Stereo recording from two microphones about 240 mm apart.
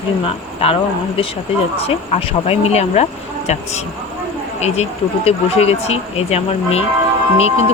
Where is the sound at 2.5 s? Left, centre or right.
Left.